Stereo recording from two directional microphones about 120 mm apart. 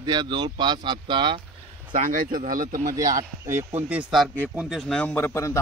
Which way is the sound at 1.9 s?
90° right.